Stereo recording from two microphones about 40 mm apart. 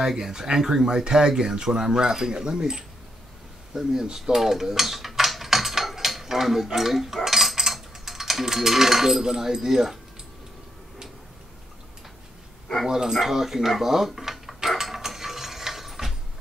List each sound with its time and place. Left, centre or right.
0.0 s speech: centre
12.8 s speech: centre
14.8 s mechanisms: centre